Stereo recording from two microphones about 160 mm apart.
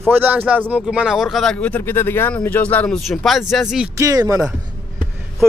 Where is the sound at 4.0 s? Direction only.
20° right (ahead or behind).